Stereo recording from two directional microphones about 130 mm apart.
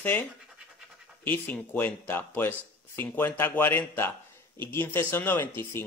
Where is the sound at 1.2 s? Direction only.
15° left (ahead or behind).